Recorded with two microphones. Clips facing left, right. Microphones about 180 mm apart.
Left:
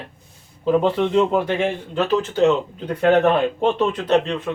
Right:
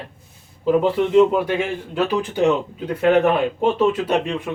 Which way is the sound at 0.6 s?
10° right (ahead or behind).